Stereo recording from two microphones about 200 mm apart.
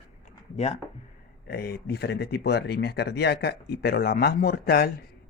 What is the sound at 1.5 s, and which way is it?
Speech, 50° left (ahead or behind).